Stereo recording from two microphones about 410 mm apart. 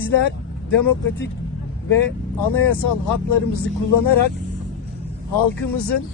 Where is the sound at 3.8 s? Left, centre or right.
Left.